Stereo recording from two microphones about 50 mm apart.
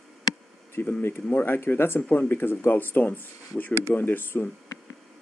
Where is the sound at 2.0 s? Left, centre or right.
Left.